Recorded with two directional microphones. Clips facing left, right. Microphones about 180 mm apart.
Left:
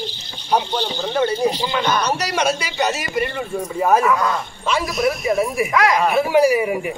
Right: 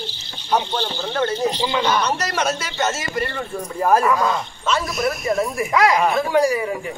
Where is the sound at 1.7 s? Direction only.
15° right (ahead or behind).